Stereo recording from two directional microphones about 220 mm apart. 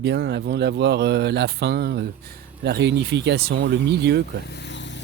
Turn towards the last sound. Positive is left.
turn(degrees=55)  # may be behind; listen again after turning